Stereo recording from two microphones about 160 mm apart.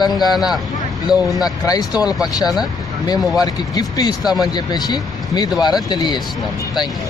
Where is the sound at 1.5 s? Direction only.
25° left (ahead or behind).